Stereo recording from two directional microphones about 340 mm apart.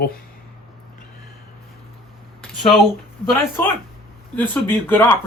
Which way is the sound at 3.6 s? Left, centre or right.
Centre.